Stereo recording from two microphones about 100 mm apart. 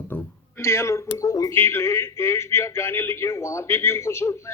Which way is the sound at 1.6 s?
25° left (ahead or behind).